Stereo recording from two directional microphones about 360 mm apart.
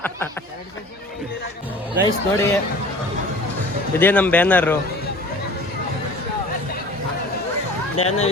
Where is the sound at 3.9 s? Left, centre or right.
Centre.